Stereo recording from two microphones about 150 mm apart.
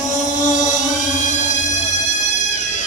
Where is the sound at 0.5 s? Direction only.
55° left (ahead or behind).